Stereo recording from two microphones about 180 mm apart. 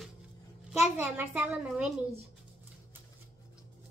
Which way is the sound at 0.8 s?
10° right (ahead or behind).